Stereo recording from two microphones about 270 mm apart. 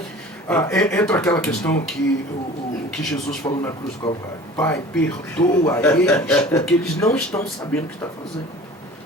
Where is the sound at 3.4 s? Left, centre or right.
Centre.